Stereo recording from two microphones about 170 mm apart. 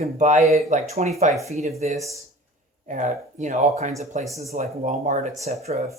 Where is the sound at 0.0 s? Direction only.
40° right (ahead or behind).